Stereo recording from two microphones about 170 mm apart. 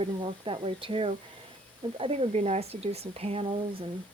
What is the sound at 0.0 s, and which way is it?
Speech, 30° right (ahead or behind).